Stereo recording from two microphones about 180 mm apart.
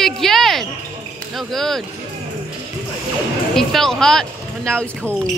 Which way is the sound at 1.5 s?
Centre (ahead or behind).